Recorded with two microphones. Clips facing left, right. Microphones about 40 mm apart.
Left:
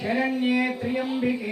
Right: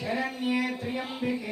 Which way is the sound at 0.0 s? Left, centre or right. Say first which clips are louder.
Left 6 dB; left.